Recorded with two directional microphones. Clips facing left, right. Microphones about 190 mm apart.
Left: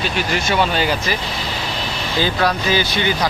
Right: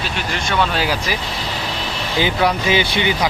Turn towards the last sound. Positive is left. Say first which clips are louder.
# right 1 dB
turn(degrees=-20)  # may be behind; listen again after turning